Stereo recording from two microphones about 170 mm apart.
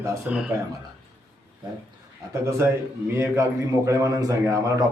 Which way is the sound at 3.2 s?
20° right (ahead or behind).